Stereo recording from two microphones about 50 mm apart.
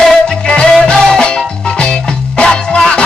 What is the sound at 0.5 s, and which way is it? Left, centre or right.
Music, centre.